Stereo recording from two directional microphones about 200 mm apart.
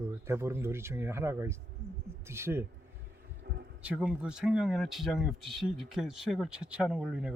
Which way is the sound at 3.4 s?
55° right (ahead or behind).